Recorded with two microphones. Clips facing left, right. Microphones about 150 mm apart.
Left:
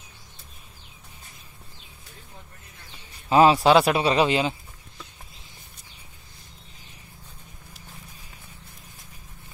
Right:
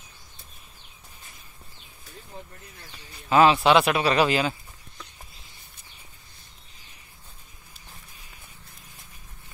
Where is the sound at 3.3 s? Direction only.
35° left (ahead or behind).